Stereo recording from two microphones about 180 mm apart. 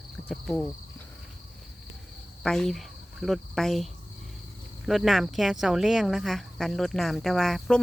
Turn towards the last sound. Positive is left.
turn(degrees=0)  # may be behind; listen again after turning